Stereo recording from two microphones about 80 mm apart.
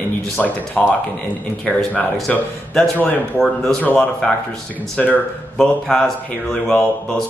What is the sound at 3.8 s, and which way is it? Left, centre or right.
Speech, left.